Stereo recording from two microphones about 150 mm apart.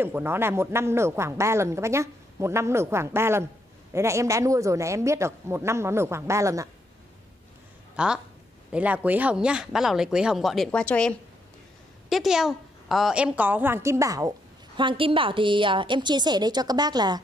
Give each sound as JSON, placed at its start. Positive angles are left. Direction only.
{"t": 0.0, "sound": "a woman's voice", "side_deg": -15}
{"t": 7.9, "sound": "speech", "side_deg": -5}
{"t": 14.8, "sound": "a woman's voice", "side_deg": -35}